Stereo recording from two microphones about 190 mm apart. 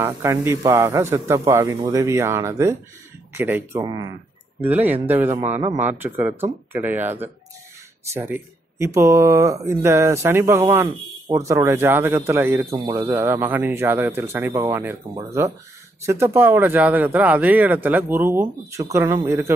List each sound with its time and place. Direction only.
0.0 s speech: 15° right (ahead or behind)